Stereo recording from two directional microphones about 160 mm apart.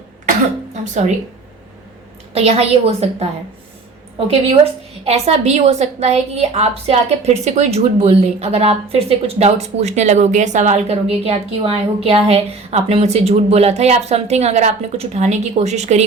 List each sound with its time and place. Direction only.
2.3 s a woman's voice: 40° right (ahead or behind)
4.3 s a woman's voice: 40° right (ahead or behind)